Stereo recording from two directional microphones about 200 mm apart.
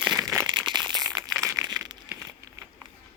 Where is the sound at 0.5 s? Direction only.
20° right (ahead or behind).